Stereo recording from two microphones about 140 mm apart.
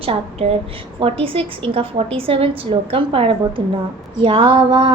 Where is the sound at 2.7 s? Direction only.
40° right (ahead or behind).